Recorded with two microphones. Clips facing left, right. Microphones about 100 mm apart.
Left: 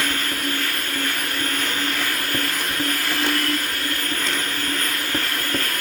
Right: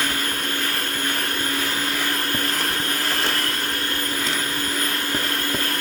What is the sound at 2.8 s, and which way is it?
Vacuum cleaner, 30° right (ahead or behind).